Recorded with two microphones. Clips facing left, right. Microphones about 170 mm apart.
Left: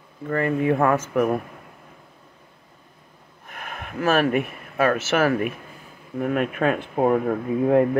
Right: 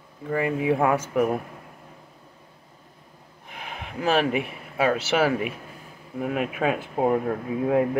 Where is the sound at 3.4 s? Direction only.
55° left (ahead or behind).